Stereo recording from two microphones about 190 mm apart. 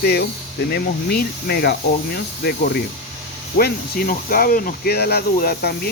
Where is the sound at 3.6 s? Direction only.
50° left (ahead or behind).